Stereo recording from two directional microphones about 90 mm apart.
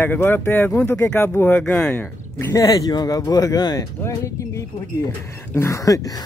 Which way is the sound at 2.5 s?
40° left (ahead or behind).